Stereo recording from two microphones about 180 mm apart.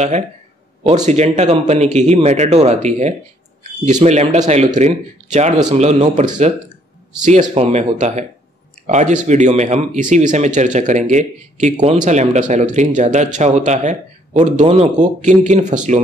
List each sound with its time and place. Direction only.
1.0 s speech: 40° right (ahead or behind)
7.2 s speech: 40° right (ahead or behind)